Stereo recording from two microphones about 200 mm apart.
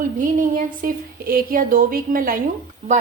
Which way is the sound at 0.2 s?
40° right (ahead or behind).